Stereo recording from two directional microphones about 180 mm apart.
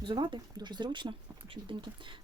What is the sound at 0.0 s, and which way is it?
Speech, 25° right (ahead or behind).